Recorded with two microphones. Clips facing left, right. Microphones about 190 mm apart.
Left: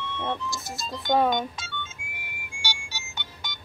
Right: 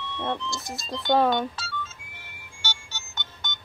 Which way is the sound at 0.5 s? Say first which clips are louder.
Right 1 dB; centre (ahead or behind).